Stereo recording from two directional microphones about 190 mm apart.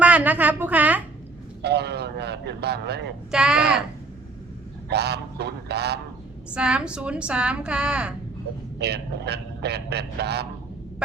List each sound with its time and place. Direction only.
0.0 s a sound: 10° right (ahead or behind)
1.6 s a man's voice: 60° right (ahead or behind)
3.3 s a woman's voice: 5° right (ahead or behind)
4.9 s a man's voice: 60° right (ahead or behind)
6.5 s a woman's voice: 5° right (ahead or behind)
8.8 s a man's voice: 60° right (ahead or behind)